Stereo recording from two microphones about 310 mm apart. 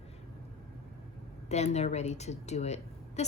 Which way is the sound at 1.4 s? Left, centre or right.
Left.